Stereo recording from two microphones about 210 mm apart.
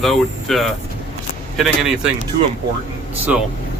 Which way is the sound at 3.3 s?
5° right (ahead or behind).